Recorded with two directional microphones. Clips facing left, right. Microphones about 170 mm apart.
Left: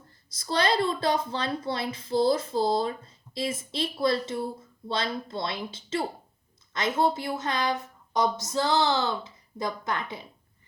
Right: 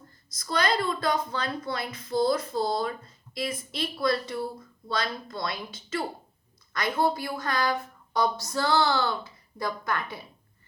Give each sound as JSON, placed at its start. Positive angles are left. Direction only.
{"t": 0.3, "sound": "a woman's voice", "side_deg": 30}